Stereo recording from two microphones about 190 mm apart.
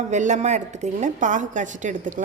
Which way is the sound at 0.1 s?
40° right (ahead or behind).